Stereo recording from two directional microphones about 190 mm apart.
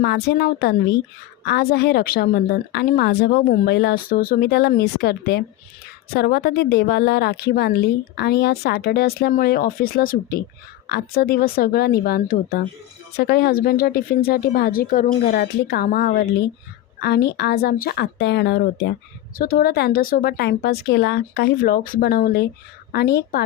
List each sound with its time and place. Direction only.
0.0 s a woman's voice: 55° left (ahead or behind)
3.7 s a woman's voice: 60° left (ahead or behind)
19.4 s a woman's voice: 50° left (ahead or behind)